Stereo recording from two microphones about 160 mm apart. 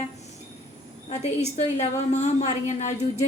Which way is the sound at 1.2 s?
45° left (ahead or behind).